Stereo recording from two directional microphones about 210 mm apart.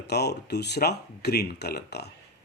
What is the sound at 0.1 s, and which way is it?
A man's voice, 50° left (ahead or behind).